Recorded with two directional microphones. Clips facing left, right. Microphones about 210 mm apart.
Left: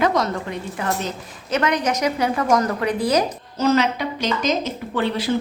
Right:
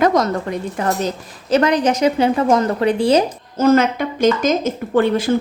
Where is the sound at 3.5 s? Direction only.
50° right (ahead or behind).